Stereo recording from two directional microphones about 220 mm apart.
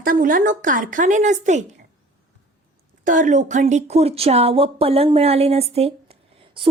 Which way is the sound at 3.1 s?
35° right (ahead or behind).